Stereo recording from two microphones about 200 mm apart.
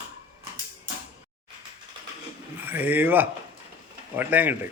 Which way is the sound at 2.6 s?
10° right (ahead or behind).